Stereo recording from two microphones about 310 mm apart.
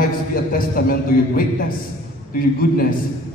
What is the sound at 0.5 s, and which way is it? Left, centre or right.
A man's voice, left.